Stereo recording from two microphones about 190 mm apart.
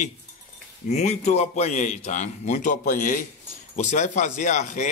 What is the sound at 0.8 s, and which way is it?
A man's voice, 35° left (ahead or behind).